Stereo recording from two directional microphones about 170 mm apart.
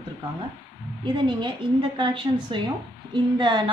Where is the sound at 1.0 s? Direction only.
30° right (ahead or behind).